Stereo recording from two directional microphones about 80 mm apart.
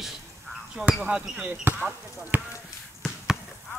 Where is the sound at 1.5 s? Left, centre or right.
Right.